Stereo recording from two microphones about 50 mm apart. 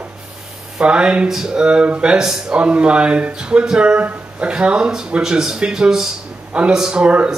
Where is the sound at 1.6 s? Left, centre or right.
Right.